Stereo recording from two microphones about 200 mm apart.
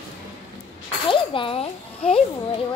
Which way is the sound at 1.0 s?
25° left (ahead or behind).